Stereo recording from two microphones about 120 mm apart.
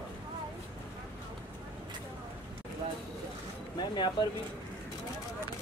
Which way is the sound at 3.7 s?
35° left (ahead or behind).